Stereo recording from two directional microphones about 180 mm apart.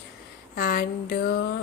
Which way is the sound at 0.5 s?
55° left (ahead or behind).